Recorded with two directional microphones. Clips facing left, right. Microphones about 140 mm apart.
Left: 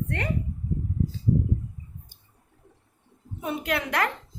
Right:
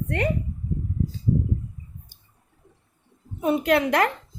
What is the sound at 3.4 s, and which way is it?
Speech, 25° right (ahead or behind).